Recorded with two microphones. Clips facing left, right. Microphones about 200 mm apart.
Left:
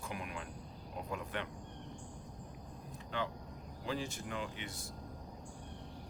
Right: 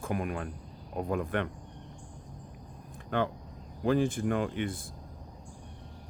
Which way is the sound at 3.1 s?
55° right (ahead or behind).